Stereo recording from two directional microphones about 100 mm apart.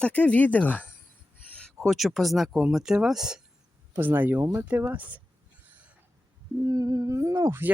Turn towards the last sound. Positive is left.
turn(degrees=-25)  # may be behind; listen again after turning